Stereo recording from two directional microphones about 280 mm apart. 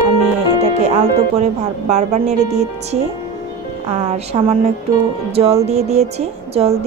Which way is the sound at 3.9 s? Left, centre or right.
Right.